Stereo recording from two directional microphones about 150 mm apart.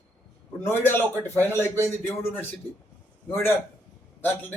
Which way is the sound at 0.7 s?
15° left (ahead or behind).